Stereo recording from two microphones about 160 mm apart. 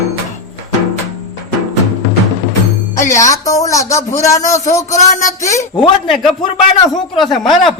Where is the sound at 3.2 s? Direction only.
20° left (ahead or behind).